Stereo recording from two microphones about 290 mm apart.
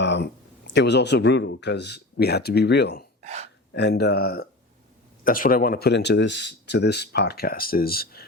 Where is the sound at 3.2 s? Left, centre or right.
Right.